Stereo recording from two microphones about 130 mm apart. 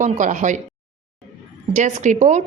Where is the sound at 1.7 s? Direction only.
65° right (ahead or behind).